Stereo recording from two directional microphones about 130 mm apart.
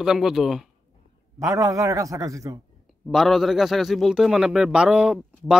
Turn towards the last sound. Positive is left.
turn(degrees=-5)  # may be behind; listen again after turning